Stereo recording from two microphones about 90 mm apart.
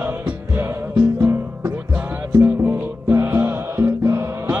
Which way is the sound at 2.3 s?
25° right (ahead or behind).